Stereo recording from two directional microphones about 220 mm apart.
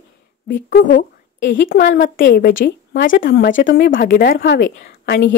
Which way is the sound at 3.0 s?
40° left (ahead or behind).